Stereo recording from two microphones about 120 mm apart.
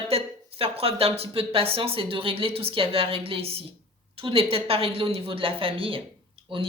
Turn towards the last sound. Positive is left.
turn(degrees=-45)  # may be behind; listen again after turning